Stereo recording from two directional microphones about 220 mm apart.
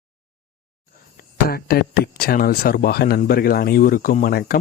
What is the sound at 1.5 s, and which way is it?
Speech, 45° left (ahead or behind).